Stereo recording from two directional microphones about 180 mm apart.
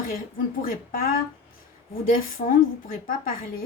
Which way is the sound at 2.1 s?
50° left (ahead or behind).